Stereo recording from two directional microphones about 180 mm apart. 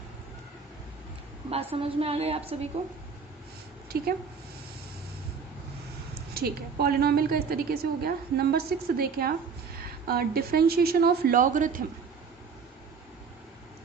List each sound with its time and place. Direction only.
1.5 s a woman's voice: 30° right (ahead or behind)
3.9 s a woman's voice: 55° right (ahead or behind)
6.3 s a woman's voice: 60° right (ahead or behind)